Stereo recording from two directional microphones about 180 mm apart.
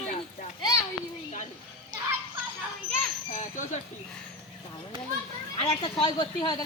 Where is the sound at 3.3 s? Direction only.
45° left (ahead or behind).